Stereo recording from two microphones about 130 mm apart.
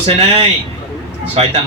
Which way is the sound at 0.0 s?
45° right (ahead or behind).